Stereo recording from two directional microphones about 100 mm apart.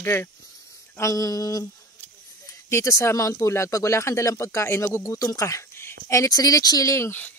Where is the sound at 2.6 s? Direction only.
30° left (ahead or behind).